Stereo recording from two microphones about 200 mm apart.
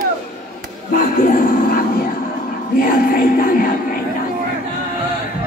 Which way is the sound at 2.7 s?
45° left (ahead or behind).